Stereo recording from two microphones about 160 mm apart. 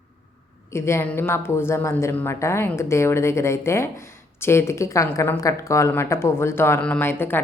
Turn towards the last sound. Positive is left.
turn(degrees=10)  # may be behind; listen again after turning